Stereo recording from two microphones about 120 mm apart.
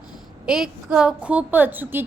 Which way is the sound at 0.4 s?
5° right (ahead or behind).